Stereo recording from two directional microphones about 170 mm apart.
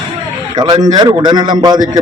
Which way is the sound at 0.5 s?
20° right (ahead or behind).